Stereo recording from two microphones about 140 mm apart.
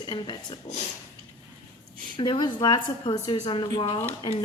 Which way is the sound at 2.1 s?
35° left (ahead or behind).